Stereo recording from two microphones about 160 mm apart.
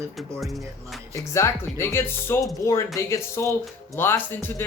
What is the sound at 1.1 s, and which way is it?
Speech, 20° left (ahead or behind).